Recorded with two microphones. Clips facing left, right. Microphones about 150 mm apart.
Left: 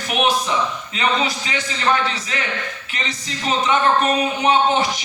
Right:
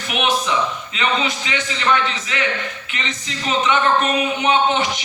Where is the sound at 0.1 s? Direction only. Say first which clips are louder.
Left 1 dB; 35° left (ahead or behind).